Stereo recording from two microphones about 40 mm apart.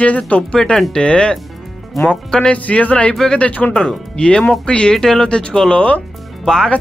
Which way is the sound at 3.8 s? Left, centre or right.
Centre.